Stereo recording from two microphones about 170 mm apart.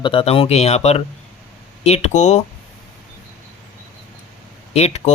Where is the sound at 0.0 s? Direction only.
30° left (ahead or behind).